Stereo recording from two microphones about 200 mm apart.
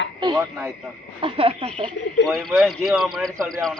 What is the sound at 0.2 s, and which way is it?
Radio, 25° right (ahead or behind).